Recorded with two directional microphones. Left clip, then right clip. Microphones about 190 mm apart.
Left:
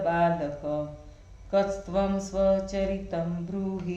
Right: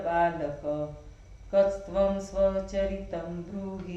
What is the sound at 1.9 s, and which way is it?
Speech, 45° left (ahead or behind).